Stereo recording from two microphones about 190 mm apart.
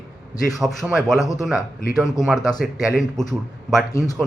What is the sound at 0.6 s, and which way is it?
Speech, centre (ahead or behind).